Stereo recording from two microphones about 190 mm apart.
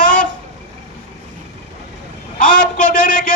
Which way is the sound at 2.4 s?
45° left (ahead or behind).